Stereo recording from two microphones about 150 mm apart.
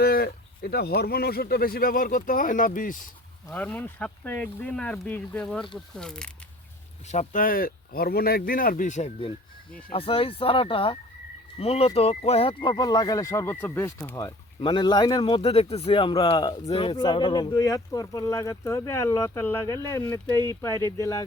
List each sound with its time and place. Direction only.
0.0 s speech: 90° left; by 3.0 s 65° left (ahead or behind)
3.5 s speech: 10° left (ahead or behind)
7.1 s speech: 60° left (ahead or behind)
9.9 s speech: 40° left (ahead or behind); by 14.3 s 20° left (ahead or behind)
14.6 s speech: 30° left (ahead or behind)
15.4 s speech: 40° left (ahead or behind); by 21.2 s 20° left (ahead or behind)